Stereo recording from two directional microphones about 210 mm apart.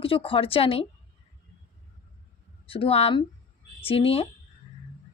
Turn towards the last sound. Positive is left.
turn(degrees=25)  # may be behind; listen again after turning